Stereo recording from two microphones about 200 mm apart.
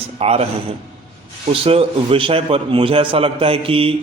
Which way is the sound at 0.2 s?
30° right (ahead or behind).